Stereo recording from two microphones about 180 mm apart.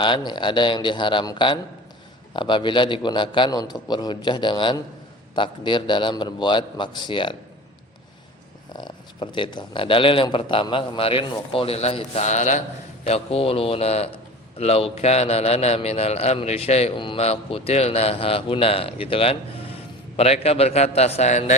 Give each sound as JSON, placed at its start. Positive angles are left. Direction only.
{"t": 0.0, "sound": "speech", "side_deg": 25}
{"t": 8.7, "sound": "a man's voice", "side_deg": 25}